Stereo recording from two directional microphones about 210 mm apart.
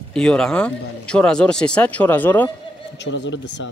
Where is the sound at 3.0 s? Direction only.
60° left (ahead or behind).